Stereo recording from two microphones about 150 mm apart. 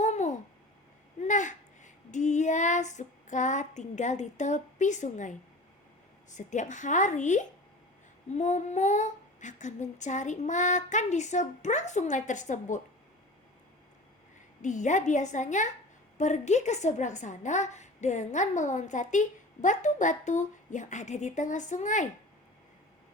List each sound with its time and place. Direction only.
0.0 s babbling: 50° left (ahead or behind)
1.2 s a sound: 55° left (ahead or behind)
6.3 s a woman's voice: 55° left (ahead or behind)
14.6 s a woman's voice: 55° left (ahead or behind)